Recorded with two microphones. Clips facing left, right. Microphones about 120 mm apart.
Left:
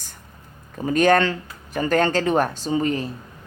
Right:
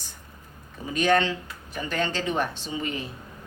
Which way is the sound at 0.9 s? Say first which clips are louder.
Left 5 dB; 50° left (ahead or behind).